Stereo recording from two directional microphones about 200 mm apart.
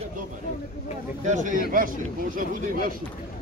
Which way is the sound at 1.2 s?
40° right (ahead or behind).